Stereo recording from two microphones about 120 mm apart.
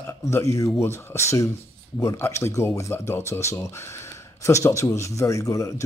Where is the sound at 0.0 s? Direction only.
25° left (ahead or behind).